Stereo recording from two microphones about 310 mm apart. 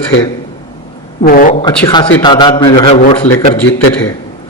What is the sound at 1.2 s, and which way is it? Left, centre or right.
A man's voice, left.